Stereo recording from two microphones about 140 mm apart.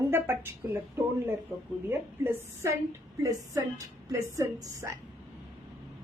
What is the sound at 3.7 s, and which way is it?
Speech, 20° right (ahead or behind).